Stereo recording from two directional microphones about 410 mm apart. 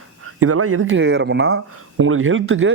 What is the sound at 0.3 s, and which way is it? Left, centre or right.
A man's voice, right.